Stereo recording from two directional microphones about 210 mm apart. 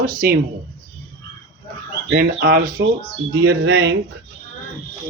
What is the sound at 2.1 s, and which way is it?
Speech, 50° right (ahead or behind).